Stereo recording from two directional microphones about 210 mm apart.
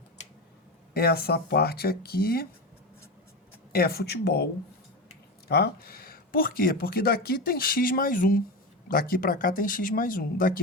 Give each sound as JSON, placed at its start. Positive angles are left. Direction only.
{"t": 0.9, "sound": "speech", "side_deg": 45}
{"t": 3.7, "sound": "speech", "side_deg": 45}
{"t": 5.5, "sound": "speech", "side_deg": 50}